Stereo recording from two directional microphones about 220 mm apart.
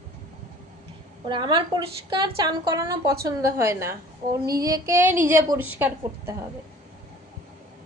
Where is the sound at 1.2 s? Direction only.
20° right (ahead or behind).